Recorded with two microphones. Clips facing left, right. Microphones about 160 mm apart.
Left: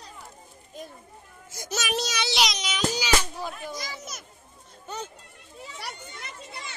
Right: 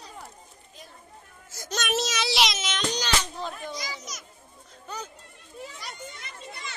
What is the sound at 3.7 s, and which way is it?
Speech, 50° left (ahead or behind).